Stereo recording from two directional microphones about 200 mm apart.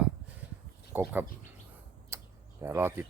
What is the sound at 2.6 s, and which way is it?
Speech, 10° right (ahead or behind).